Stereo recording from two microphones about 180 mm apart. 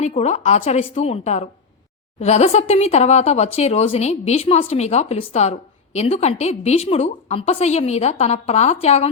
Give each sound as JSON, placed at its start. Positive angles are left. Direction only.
{"t": 0.0, "sound": "speech", "side_deg": 40}